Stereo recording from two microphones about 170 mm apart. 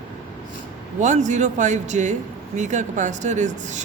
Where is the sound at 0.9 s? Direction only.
45° right (ahead or behind).